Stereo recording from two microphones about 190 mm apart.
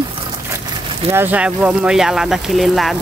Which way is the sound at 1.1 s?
10° right (ahead or behind).